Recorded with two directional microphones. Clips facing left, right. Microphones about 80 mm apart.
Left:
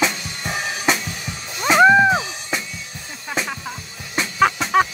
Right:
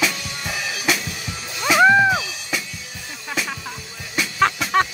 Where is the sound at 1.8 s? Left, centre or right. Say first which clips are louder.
Left 2 dB; centre.